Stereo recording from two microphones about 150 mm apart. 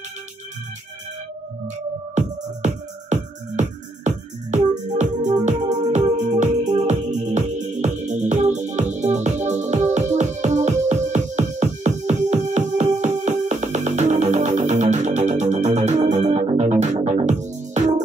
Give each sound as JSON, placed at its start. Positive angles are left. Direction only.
{"t": 2.1, "sound": "music", "side_deg": -55}